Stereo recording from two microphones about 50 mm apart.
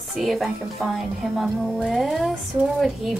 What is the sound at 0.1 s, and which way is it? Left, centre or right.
A woman's voice, centre.